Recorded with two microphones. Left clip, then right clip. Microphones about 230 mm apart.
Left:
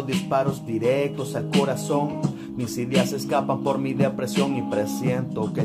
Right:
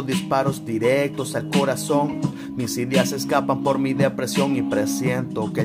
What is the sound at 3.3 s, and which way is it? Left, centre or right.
Music, right.